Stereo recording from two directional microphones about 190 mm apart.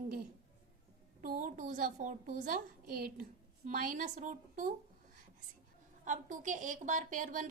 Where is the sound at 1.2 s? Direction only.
45° right (ahead or behind).